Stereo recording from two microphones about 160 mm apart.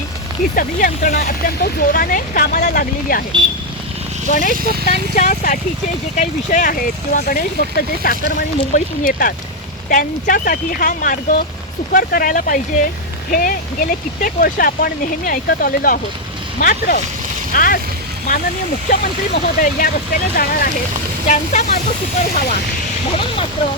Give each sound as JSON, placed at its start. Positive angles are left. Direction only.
{"t": 0.5, "sound": "speech", "side_deg": 60}
{"t": 4.3, "sound": "speech", "side_deg": 55}
{"t": 18.9, "sound": "speech", "side_deg": 60}
{"t": 21.2, "sound": "speech", "side_deg": 50}